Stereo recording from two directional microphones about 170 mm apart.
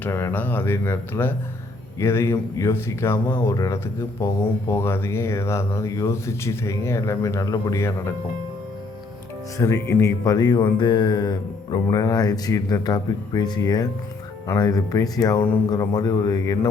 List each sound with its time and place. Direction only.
0.0 s speech: 15° left (ahead or behind)
9.6 s speech: 20° left (ahead or behind)